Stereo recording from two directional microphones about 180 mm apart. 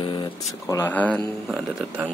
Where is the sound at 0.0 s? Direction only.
25° left (ahead or behind).